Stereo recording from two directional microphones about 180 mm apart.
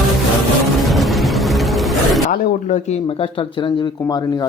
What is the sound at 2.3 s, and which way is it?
Speech, 40° left (ahead or behind).